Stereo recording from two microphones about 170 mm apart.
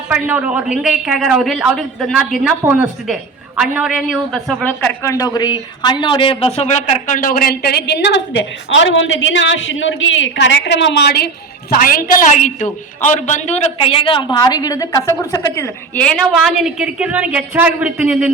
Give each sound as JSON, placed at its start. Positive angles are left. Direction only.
{"t": 0.1, "sound": "a man's voice", "side_deg": -10}
{"t": 11.7, "sound": "a man's voice", "side_deg": 55}
{"t": 16.0, "sound": "a woman's voice", "side_deg": 0}